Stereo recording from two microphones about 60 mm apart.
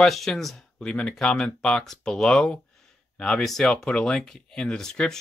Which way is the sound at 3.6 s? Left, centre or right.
Centre.